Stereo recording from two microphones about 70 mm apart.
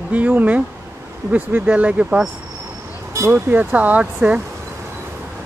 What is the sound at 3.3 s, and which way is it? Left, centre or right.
Speech, right.